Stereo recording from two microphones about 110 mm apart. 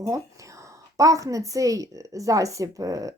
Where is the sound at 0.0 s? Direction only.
30° right (ahead or behind).